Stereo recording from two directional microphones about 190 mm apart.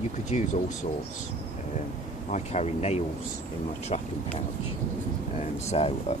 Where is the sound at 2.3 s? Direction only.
35° left (ahead or behind).